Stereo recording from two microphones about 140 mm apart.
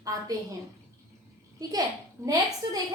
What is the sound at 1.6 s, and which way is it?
Speech, 25° right (ahead or behind).